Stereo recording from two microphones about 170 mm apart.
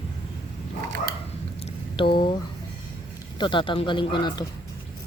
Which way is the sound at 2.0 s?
30° left (ahead or behind).